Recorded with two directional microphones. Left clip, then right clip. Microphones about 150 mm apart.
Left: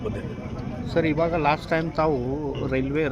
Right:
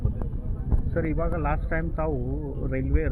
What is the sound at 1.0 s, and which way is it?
Speech, 20° left (ahead or behind).